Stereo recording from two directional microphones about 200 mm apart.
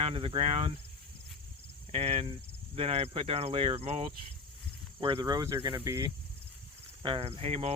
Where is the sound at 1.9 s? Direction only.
30° right (ahead or behind).